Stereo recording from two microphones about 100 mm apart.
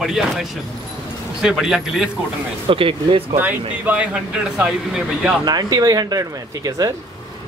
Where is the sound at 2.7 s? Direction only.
65° right (ahead or behind).